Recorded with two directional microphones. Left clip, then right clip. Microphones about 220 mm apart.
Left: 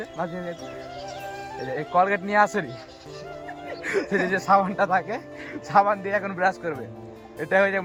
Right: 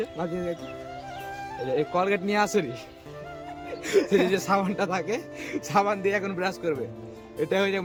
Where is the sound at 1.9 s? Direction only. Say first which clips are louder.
Left 8 dB; 5° left (ahead or behind).